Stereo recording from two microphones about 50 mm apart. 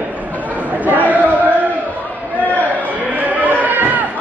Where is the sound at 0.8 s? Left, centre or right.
Right.